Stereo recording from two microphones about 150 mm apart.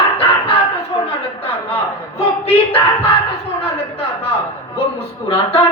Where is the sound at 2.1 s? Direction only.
40° left (ahead or behind).